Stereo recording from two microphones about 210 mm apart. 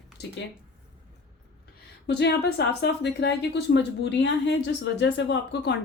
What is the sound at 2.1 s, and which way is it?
A woman's voice, 50° left (ahead or behind).